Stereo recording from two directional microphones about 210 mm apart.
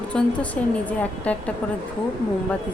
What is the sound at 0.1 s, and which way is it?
A woman's voice, 5° left (ahead or behind).